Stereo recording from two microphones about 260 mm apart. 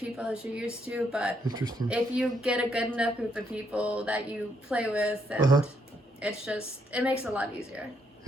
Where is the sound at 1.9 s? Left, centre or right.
Centre.